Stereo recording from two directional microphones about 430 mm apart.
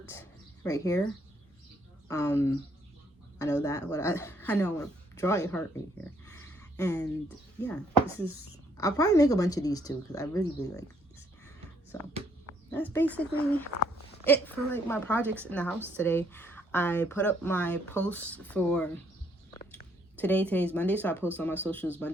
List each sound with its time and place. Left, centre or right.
0.1 s speech: centre
2.0 s a woman's voice: centre
12.7 s a woman's voice: centre
20.1 s a woman's voice: centre